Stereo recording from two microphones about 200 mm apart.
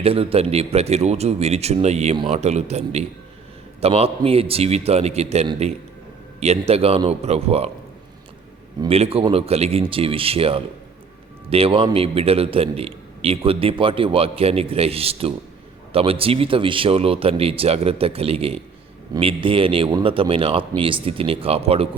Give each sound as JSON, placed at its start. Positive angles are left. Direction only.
{"t": 0.0, "sound": "speech", "side_deg": -30}
{"t": 8.8, "sound": "a man's voice", "side_deg": -30}